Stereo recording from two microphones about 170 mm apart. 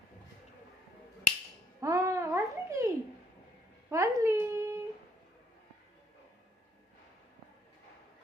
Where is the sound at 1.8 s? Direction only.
20° right (ahead or behind).